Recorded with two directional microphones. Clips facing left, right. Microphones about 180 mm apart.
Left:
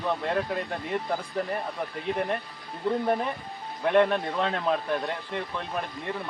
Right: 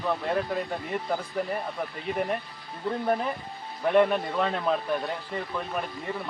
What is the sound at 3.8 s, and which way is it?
Speech, centre (ahead or behind).